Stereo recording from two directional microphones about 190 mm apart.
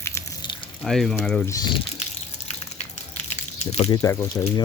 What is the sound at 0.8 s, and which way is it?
Speech, centre (ahead or behind).